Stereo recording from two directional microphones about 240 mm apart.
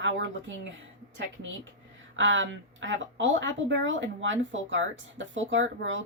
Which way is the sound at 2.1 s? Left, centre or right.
Right.